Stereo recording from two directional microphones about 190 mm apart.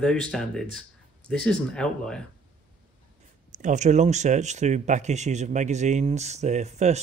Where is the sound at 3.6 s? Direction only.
40° right (ahead or behind).